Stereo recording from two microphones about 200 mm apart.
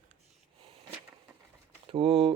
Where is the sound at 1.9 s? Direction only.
25° right (ahead or behind).